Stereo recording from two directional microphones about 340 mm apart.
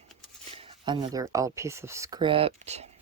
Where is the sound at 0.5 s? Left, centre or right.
Centre.